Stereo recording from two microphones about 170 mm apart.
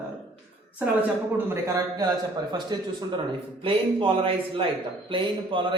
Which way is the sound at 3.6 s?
30° right (ahead or behind).